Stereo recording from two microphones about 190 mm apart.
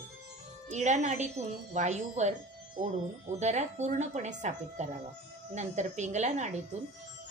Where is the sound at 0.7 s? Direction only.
35° right (ahead or behind).